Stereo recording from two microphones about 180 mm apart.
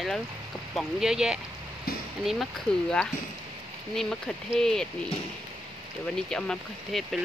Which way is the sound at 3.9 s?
5° left (ahead or behind).